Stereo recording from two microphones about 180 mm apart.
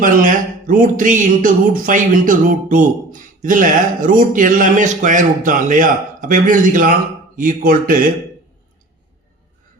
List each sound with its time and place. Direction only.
0.0 s speech: 50° right (ahead or behind)